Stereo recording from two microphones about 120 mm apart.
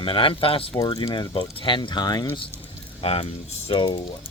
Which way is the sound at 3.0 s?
55° left (ahead or behind).